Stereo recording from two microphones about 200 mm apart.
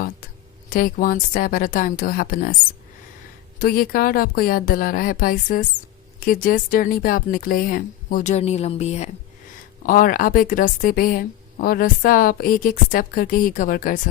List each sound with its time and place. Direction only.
0.7 s speech: 45° left (ahead or behind)
3.6 s speech: 45° left (ahead or behind)